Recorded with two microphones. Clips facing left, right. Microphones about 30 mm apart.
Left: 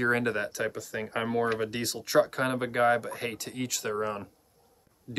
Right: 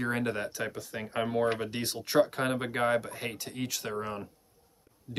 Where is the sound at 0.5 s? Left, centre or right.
Centre.